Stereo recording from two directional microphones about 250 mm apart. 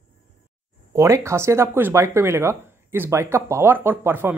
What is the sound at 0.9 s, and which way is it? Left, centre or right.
Speech, centre.